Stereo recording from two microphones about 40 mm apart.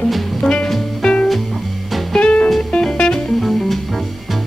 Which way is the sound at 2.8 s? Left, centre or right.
Centre.